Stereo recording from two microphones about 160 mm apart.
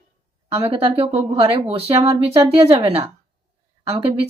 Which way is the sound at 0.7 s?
35° right (ahead or behind).